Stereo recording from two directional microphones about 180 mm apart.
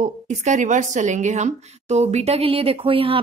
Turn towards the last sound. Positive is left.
turn(degrees=-30)  # may be behind; listen again after turning